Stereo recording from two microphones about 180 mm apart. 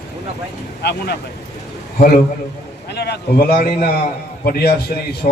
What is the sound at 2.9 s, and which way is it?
A man's voice, 65° left (ahead or behind).